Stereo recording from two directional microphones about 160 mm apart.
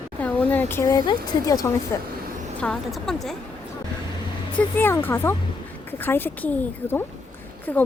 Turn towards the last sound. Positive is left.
turn(degrees=10)  # may be behind; listen again after turning